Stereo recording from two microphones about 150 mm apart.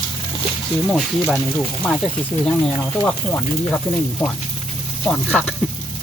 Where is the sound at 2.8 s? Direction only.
10° left (ahead or behind).